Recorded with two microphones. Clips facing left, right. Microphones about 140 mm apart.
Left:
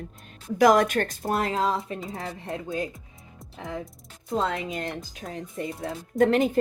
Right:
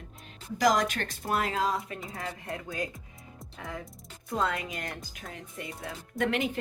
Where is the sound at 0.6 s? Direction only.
55° left (ahead or behind).